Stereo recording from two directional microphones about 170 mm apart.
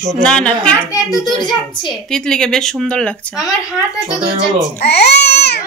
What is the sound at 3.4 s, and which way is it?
Speech, 5° right (ahead or behind).